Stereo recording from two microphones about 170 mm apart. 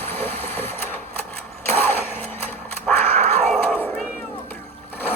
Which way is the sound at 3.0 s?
40° right (ahead or behind).